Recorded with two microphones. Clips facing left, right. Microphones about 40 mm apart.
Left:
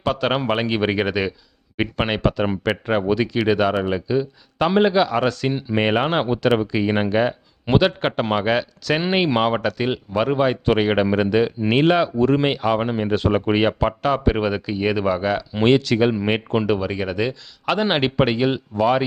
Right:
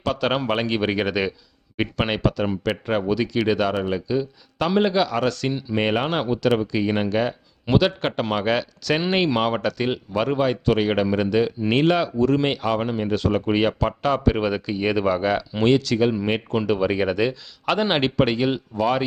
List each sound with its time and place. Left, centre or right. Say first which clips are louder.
0.0 s speech: left 2 dB; centre
12.1 s speech: left 2 dB; left
12.4 s speech: left 2 dB; centre
15.6 s speech: left 2 dB; left; by 16.8 s centre
16.8 s speech: right 2 dB; centre